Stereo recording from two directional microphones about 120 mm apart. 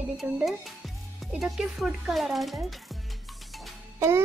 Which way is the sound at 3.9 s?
25° right (ahead or behind).